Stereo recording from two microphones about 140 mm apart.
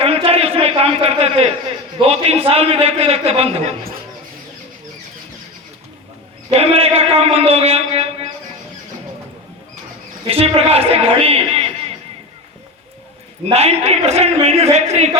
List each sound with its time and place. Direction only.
0.0 s a sound: 45° right (ahead or behind)
2.0 s a man's voice: 45° right (ahead or behind)
6.5 s a man's voice: 45° right (ahead or behind)
10.2 s a man's voice: 45° right (ahead or behind)
13.5 s a man's voice: 45° right (ahead or behind)